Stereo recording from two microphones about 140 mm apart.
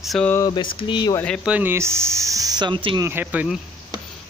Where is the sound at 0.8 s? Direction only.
35° left (ahead or behind).